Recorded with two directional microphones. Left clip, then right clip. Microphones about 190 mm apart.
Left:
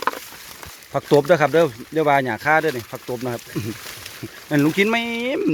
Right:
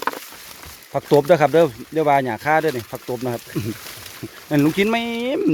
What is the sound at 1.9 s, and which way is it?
Speech, centre (ahead or behind).